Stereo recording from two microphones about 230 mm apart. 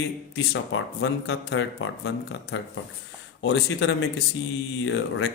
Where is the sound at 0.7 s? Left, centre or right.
Left.